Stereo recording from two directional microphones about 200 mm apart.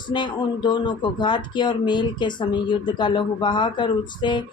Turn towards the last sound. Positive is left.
turn(degrees=20)  # may be behind; listen again after turning